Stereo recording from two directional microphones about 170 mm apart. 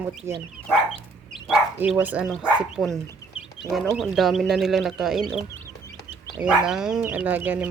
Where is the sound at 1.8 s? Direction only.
10° right (ahead or behind).